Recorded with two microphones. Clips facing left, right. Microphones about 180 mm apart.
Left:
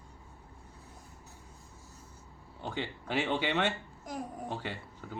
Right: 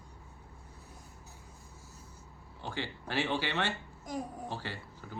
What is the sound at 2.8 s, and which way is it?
Speech, 20° left (ahead or behind).